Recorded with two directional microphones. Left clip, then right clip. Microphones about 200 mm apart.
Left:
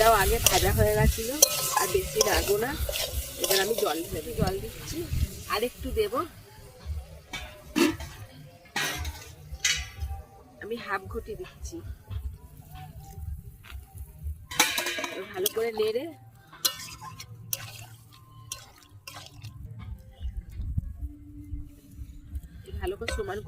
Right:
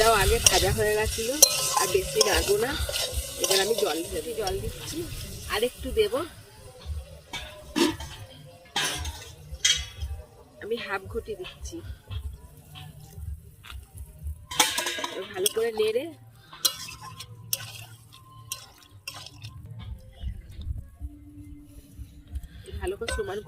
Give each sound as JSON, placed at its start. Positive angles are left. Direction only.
{"t": 0.0, "sound": "stir", "side_deg": 15}
{"t": 7.7, "sound": "a sound", "side_deg": 35}
{"t": 10.6, "sound": "speech", "side_deg": 30}
{"t": 14.5, "sound": "music", "side_deg": 40}
{"t": 15.3, "sound": "stir", "side_deg": 15}
{"t": 18.6, "sound": "water", "side_deg": 15}
{"t": 22.8, "sound": "speech", "side_deg": 30}
{"t": 23.0, "sound": "speech", "side_deg": 20}